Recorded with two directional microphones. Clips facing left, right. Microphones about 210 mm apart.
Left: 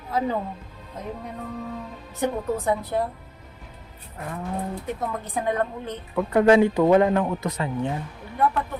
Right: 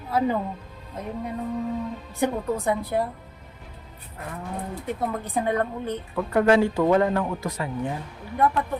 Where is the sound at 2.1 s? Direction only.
10° right (ahead or behind).